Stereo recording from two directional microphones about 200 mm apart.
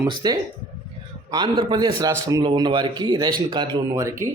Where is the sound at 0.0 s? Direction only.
20° right (ahead or behind).